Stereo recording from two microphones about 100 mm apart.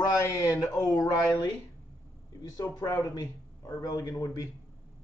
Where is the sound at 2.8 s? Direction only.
35° left (ahead or behind).